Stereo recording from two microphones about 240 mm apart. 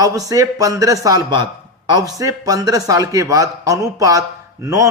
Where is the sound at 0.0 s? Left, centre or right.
Centre.